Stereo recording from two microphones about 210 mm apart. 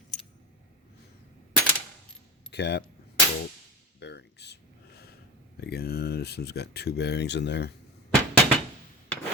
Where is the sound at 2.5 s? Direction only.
55° left (ahead or behind).